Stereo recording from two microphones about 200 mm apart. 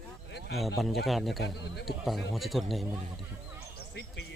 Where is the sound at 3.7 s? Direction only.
55° left (ahead or behind).